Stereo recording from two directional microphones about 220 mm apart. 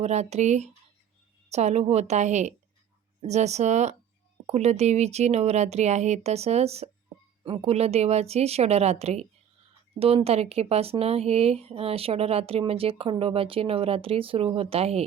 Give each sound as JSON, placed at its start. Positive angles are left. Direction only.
{"t": 0.0, "sound": "a woman's voice", "side_deg": -30}